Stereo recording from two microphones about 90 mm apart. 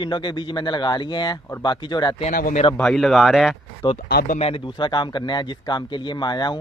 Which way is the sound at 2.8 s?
5° left (ahead or behind).